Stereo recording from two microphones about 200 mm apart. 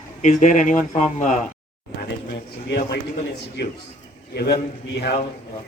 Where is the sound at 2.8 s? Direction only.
45° left (ahead or behind).